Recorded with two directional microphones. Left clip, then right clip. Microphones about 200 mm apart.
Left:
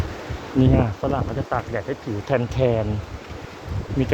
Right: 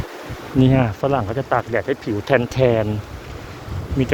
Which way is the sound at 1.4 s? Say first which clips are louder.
Right 6 dB; 35° right (ahead or behind).